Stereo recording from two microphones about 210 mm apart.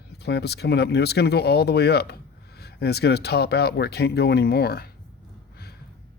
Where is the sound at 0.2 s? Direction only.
50° left (ahead or behind).